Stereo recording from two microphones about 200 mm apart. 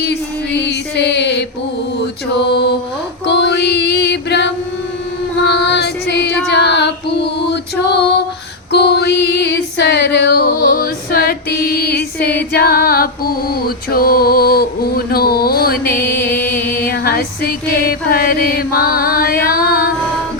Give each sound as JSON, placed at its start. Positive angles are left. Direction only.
{"t": 0.0, "sound": "music", "side_deg": 55}
{"t": 2.5, "sound": "mantra", "side_deg": 55}
{"t": 3.2, "sound": "music", "side_deg": 55}
{"t": 6.5, "sound": "female singing", "side_deg": 60}
{"t": 8.7, "sound": "female singing", "side_deg": 55}
{"t": 16.3, "sound": "music", "side_deg": 10}
{"t": 16.8, "sound": "music", "side_deg": 50}